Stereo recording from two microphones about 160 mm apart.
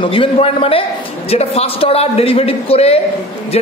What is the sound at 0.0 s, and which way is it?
A woman's voice, 35° left (ahead or behind).